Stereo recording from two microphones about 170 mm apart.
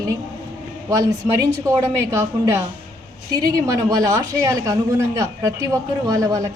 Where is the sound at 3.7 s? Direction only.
20° right (ahead or behind).